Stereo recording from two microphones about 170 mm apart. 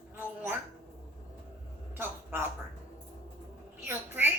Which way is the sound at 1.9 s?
10° right (ahead or behind).